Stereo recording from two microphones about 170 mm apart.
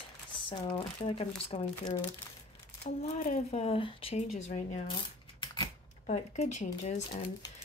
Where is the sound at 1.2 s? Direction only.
30° left (ahead or behind).